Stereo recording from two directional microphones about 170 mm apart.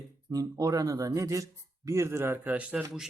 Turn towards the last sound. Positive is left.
turn(degrees=-5)  # may be behind; listen again after turning